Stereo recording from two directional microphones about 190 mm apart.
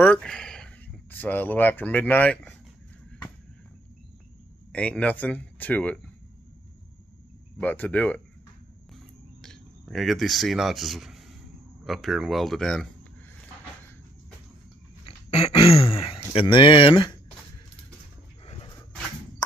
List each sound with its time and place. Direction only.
0.0 s speech: 5° left (ahead or behind)
4.7 s speech: 5° left (ahead or behind)
7.6 s speech: 10° left (ahead or behind)
8.9 s cricket: centre (ahead or behind)
11.8 s speech: centre (ahead or behind)
15.0 s dog: 35° left (ahead or behind)
15.9 s a sound: 30° left (ahead or behind)
16.3 s speech: 25° left (ahead or behind)